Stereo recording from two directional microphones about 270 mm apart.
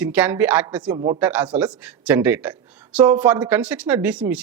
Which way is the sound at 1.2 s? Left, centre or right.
Centre.